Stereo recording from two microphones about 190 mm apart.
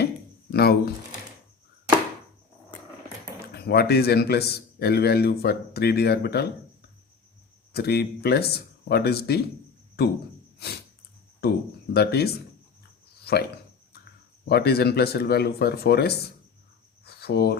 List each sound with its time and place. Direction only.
0.5 s speech: 55° left (ahead or behind)
3.5 s speech: 55° left (ahead or behind)
7.7 s speech: 55° left (ahead or behind)
10.6 s a sound: 60° left (ahead or behind)
11.4 s speech: 55° left (ahead or behind)
14.4 s speech: 55° left (ahead or behind)
17.1 s cricket: 55° left (ahead or behind)